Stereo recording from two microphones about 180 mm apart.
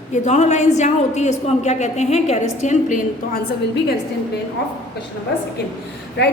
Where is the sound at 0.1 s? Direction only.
40° left (ahead or behind).